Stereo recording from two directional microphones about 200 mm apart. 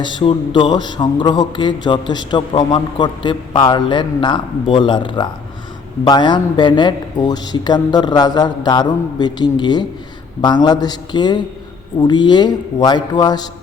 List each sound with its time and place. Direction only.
0.0 s a man's voice: 25° left (ahead or behind)